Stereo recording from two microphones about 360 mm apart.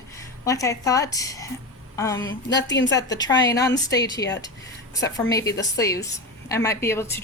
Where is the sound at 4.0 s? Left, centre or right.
Centre.